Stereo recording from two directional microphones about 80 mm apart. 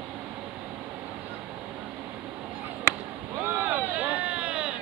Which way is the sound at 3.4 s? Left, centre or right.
Right.